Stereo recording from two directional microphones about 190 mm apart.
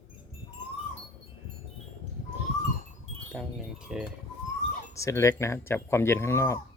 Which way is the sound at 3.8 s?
5° right (ahead or behind).